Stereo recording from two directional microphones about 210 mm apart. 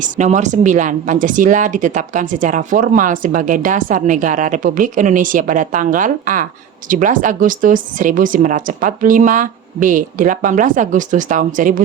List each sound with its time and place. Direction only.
0.0 s speech: 35° right (ahead or behind)